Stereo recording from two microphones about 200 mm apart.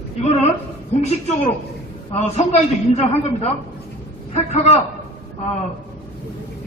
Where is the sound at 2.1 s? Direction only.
35° left (ahead or behind).